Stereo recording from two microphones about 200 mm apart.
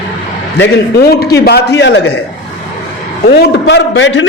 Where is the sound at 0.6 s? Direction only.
50° left (ahead or behind).